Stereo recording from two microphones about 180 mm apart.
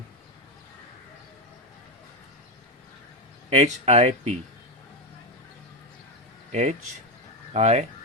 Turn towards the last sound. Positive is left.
turn(degrees=-35)  # may be behind; listen again after turning